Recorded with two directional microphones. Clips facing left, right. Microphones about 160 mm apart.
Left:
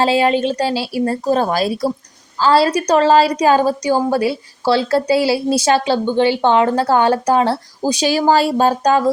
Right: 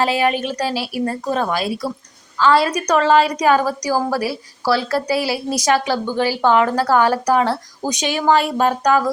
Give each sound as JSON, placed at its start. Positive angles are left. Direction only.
{"t": 0.0, "sound": "a woman's voice", "side_deg": 30}